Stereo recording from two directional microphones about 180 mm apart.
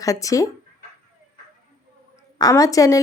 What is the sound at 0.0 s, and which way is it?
Speech, 20° left (ahead or behind).